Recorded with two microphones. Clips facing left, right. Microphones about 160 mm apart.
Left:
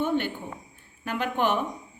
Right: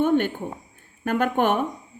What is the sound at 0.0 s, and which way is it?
Speech, 50° right (ahead or behind).